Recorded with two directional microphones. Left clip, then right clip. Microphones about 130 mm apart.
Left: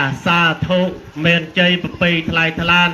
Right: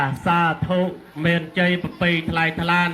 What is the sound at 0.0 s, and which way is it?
Speech, 25° right (ahead or behind).